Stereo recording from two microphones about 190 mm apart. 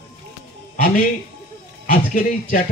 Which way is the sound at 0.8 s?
45° left (ahead or behind).